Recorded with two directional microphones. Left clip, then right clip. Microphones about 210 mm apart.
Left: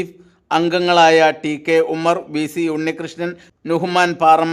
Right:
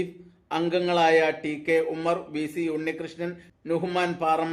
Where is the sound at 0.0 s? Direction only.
50° left (ahead or behind).